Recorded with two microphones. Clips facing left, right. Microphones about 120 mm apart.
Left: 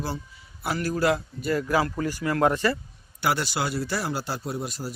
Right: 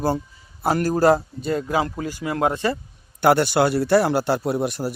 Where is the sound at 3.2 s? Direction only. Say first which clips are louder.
Right 9 dB; 60° right (ahead or behind).